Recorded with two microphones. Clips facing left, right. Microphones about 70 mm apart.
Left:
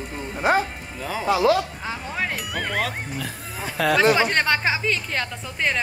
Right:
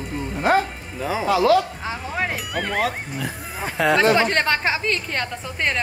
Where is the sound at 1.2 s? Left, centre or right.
Left.